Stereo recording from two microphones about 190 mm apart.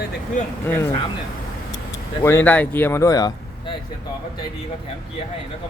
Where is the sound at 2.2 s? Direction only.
10° left (ahead or behind).